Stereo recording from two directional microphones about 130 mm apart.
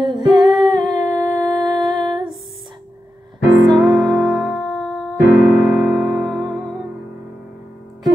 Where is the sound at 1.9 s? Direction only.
35° right (ahead or behind).